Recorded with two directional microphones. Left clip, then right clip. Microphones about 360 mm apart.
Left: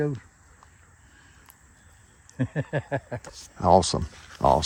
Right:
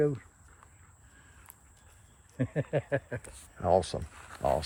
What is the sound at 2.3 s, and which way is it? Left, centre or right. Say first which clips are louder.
Speech: left 2 dB; left.